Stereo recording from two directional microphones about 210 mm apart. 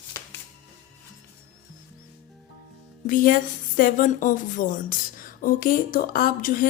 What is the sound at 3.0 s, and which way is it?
Speech, 40° left (ahead or behind).